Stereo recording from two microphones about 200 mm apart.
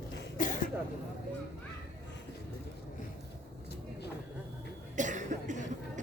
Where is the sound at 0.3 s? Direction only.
40° left (ahead or behind).